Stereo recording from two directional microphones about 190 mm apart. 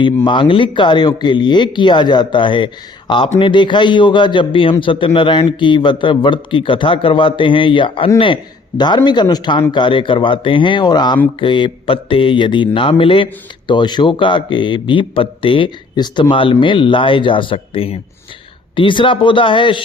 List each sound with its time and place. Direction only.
0.3 s a man's voice: 25° left (ahead or behind)